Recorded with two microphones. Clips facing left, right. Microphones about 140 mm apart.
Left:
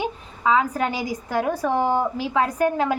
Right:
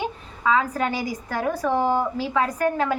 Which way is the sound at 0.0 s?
15° left (ahead or behind).